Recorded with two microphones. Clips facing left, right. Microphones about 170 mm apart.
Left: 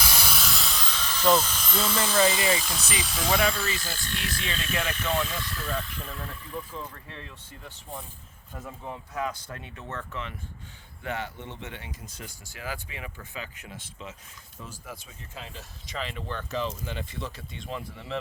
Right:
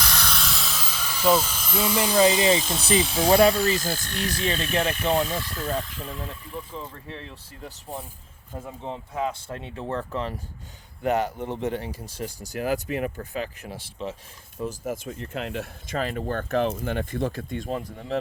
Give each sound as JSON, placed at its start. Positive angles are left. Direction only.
{"t": 0.0, "sound": "speech", "side_deg": 5}
{"t": 6.0, "sound": "speech", "side_deg": -15}
{"t": 8.5, "sound": "speech", "side_deg": -25}
{"t": 14.7, "sound": "speech", "side_deg": -45}
{"t": 15.1, "sound": "speech", "side_deg": -70}
{"t": 16.0, "sound": "speech", "side_deg": -45}